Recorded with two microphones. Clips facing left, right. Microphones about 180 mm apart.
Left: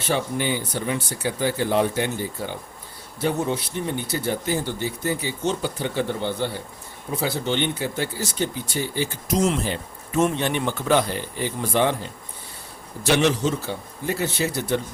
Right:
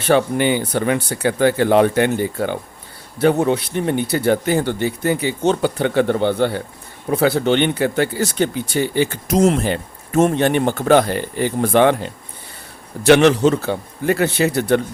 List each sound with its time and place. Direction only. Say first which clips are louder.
0.0 s speech: right 8 dB; 65° right (ahead or behind)